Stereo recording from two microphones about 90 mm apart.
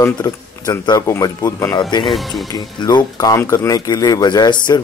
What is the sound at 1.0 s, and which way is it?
Speech, 40° left (ahead or behind).